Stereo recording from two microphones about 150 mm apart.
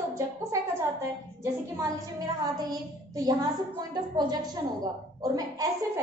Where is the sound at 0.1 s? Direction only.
20° right (ahead or behind).